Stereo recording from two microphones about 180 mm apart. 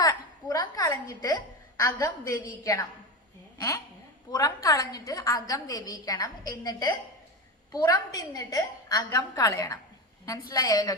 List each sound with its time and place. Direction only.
0.0 s a woman's voice: 20° left (ahead or behind)
4.3 s a woman's voice: 20° left (ahead or behind)